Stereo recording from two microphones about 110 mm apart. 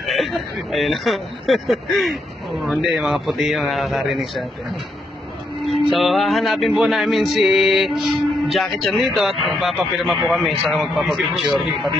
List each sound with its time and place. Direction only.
0.0 s speech: centre (ahead or behind)
5.6 s speech: centre (ahead or behind)